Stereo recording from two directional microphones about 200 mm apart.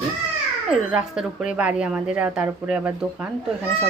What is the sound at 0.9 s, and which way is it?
A woman's voice, 5° right (ahead or behind).